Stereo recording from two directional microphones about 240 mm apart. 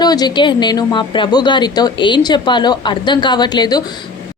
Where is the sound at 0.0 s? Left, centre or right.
Centre.